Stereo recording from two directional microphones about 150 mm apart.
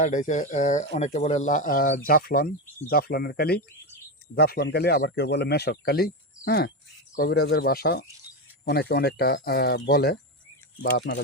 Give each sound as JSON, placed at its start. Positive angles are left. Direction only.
{"t": 0.0, "sound": "speech", "side_deg": 55}